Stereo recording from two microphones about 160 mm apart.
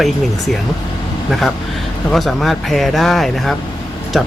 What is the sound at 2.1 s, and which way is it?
Speech, centre (ahead or behind).